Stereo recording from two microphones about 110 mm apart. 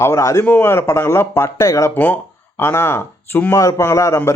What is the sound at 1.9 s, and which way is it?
A man's voice, 15° left (ahead or behind).